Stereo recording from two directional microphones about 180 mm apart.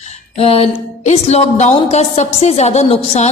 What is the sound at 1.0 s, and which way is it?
A woman's voice, 40° left (ahead or behind).